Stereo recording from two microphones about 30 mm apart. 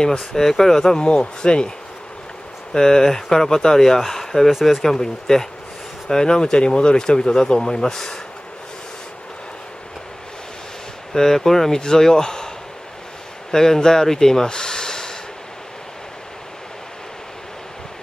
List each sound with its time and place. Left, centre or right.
0.2 s speech: centre
1.0 s speech: left
2.7 s speech: left
4.3 s speech: left
4.8 s speech: centre
11.1 s speech: centre
13.5 s speech: centre